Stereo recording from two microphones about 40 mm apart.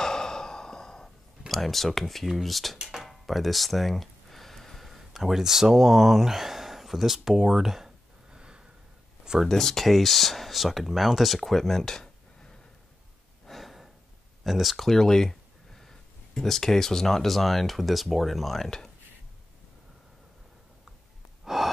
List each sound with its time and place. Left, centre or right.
0.0 s sigh: centre
1.5 s speech: centre
8.3 s gasp: right
9.5 s speech: centre
13.5 s a sound: centre
14.4 s speech: centre
21.5 s gasp: centre